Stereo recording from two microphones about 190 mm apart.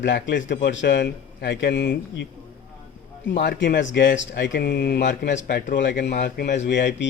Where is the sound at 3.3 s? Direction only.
60° left (ahead or behind).